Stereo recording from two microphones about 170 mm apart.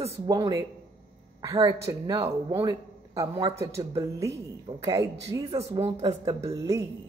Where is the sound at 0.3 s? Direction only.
25° right (ahead or behind).